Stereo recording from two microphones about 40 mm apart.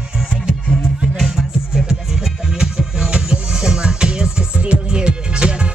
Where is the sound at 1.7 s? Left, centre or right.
Centre.